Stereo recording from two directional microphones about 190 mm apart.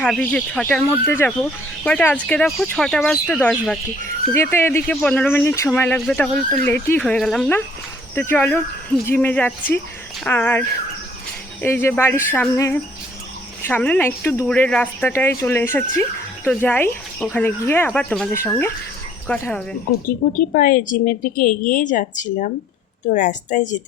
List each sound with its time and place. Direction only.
0.0 s speech: 5° left (ahead or behind)
20.5 s a woman's voice: 45° left (ahead or behind)